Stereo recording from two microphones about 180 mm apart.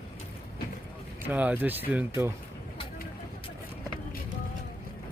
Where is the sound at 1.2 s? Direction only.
10° right (ahead or behind).